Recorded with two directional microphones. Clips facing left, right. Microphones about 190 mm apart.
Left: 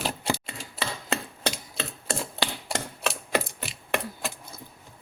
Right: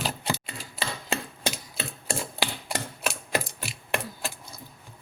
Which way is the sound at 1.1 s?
10° right (ahead or behind).